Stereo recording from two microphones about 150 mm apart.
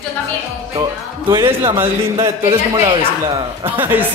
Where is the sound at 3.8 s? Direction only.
15° right (ahead or behind).